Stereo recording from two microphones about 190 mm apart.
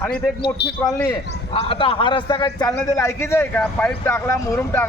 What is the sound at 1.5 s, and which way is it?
A man's voice, 30° left (ahead or behind).